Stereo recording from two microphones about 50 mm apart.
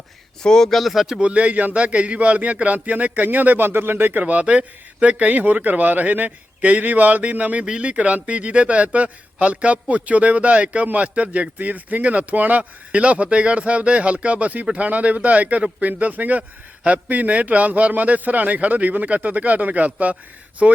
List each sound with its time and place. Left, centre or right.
0.4 s speech: centre
1.2 s speech: right
4.2 s speech: right
20.6 s speech: right